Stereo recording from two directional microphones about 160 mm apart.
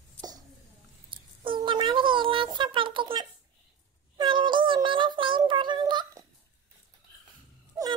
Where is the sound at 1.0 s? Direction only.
30° right (ahead or behind).